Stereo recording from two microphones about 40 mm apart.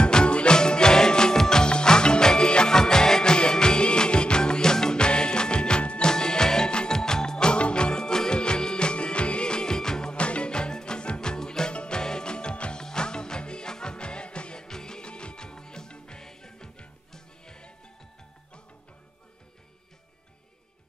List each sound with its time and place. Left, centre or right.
0.0 s music: left
10.1 s music: left